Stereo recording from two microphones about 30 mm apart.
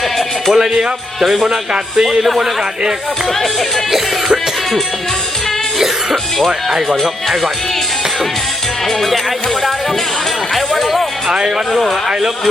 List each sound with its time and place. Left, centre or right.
0.5 s speech: centre
1.5 s speech: right
3.9 s music: centre
8.9 s music: centre
10.5 s music: centre
11.3 s speech: right
11.7 s music: centre